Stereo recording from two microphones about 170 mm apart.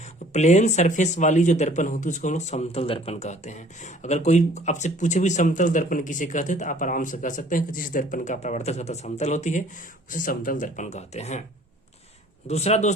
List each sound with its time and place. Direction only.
0.3 s speech: 45° left (ahead or behind)
12.5 s speech: 40° left (ahead or behind)